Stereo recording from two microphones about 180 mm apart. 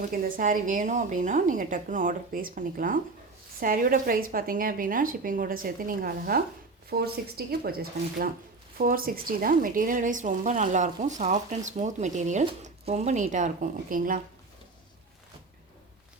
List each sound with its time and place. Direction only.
0.1 s a woman's voice: 50° right (ahead or behind)